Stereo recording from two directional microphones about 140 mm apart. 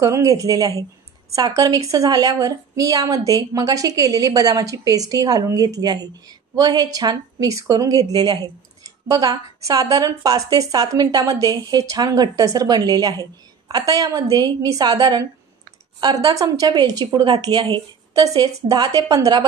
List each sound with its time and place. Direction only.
0.0 s a woman's voice: 25° right (ahead or behind)